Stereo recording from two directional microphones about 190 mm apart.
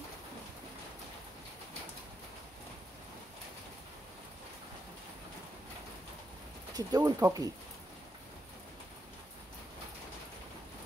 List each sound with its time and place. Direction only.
6.7 s speech: 20° right (ahead or behind)